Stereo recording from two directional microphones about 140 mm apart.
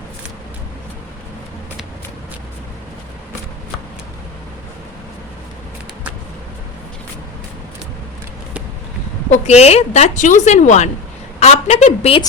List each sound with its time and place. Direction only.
9.3 s a woman's voice: 50° left (ahead or behind)